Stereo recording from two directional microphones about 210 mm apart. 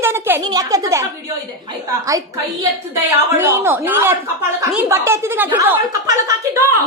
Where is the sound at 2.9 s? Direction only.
10° right (ahead or behind).